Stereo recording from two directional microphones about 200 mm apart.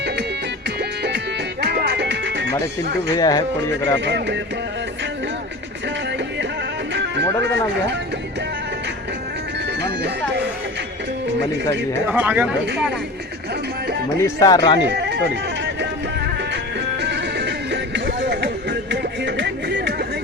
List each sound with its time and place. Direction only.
0.8 s music: 55° right (ahead or behind)
3.2 s speech: 20° left (ahead or behind)
4.0 s speech: 60° right (ahead or behind)
9.8 s speech: 60° right (ahead or behind)
12.0 s speech: 10° right (ahead or behind)
14.2 s speech: 15° left (ahead or behind)
14.8 s music: 60° right (ahead or behind)
17.0 s music: 60° right (ahead or behind)